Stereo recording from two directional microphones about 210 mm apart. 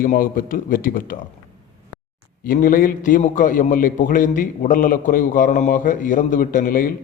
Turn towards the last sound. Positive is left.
turn(degrees=40)  # may be behind; listen again after turning